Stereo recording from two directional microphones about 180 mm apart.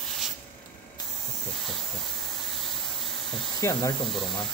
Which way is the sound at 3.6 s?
15° left (ahead or behind).